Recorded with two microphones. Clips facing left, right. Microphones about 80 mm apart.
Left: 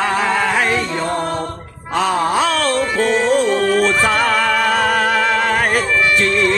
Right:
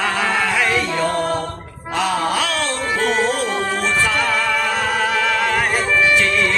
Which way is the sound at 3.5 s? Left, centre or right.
Left.